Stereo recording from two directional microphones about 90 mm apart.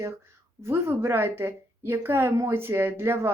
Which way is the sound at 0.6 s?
30° right (ahead or behind).